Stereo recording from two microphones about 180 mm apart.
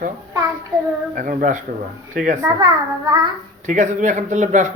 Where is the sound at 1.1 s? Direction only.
50° right (ahead or behind).